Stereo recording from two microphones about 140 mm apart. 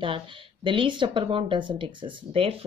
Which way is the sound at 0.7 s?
35° right (ahead or behind).